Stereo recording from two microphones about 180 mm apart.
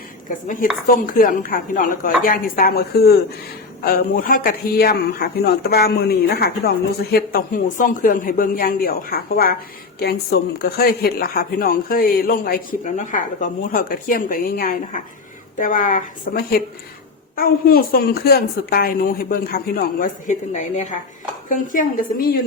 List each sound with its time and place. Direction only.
0.3 s a woman's voice: 50° left (ahead or behind)